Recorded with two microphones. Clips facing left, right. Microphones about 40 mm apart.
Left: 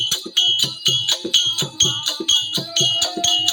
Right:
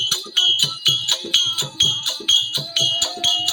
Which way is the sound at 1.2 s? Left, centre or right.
Left.